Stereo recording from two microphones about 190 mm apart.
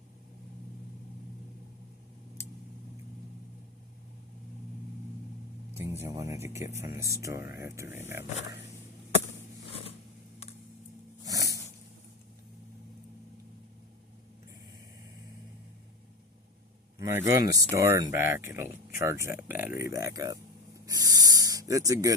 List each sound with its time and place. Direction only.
6.0 s speech: 15° right (ahead or behind)
11.3 s a sound: 15° right (ahead or behind)
17.0 s speech: 15° right (ahead or behind)